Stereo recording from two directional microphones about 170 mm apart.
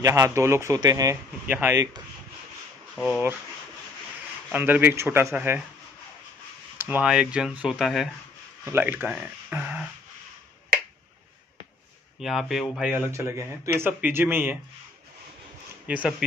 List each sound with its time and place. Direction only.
0.0 s speech: 20° right (ahead or behind)
3.0 s speech: 5° right (ahead or behind)
4.5 s speech: 10° right (ahead or behind)
6.8 s speech: 10° right (ahead or behind)
12.2 s speech: centre (ahead or behind)
15.9 s speech: 5° right (ahead or behind)